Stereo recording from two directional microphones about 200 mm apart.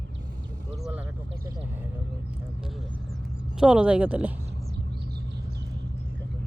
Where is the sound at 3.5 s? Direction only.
5° right (ahead or behind).